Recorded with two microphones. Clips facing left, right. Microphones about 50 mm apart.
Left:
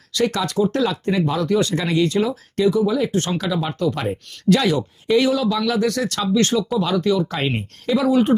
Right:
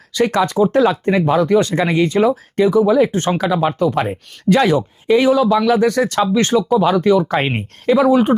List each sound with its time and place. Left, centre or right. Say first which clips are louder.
0.1 s speech: right 5 dB; right
4.8 s speech: right 3 dB; centre; by 8.0 s right
8.0 s speech: right 2 dB; right